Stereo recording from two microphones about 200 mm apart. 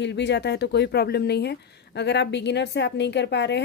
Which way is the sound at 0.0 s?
60° left (ahead or behind).